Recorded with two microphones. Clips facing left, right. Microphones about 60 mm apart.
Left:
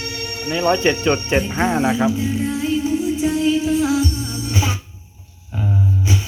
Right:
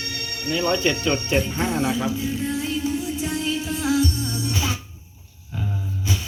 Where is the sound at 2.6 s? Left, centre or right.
Centre.